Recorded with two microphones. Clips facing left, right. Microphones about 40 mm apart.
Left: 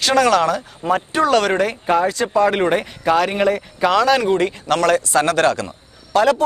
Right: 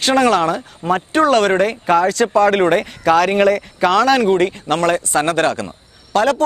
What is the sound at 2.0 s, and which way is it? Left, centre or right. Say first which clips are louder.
Speech: right 3 dB; right.